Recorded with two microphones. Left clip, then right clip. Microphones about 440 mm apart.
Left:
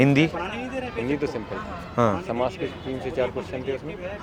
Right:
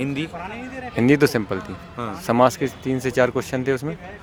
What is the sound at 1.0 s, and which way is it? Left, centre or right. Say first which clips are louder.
Speech: right 14 dB; right.